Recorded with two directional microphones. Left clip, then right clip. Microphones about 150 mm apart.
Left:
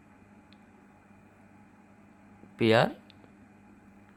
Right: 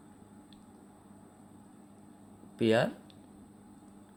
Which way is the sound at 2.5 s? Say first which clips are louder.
Left 4 dB; 35° left (ahead or behind).